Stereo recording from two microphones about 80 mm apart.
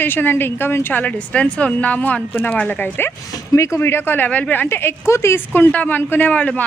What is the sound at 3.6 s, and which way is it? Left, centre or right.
Speech, left.